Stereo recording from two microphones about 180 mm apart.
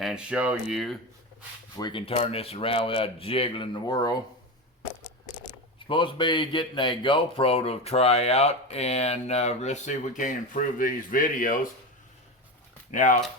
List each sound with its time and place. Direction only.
0.0 s speech: 5° right (ahead or behind)
1.8 s speech: 30° left (ahead or behind)
5.9 s speech: 25° left (ahead or behind); by 11.7 s 50° left (ahead or behind)
12.9 s speech: 45° left (ahead or behind)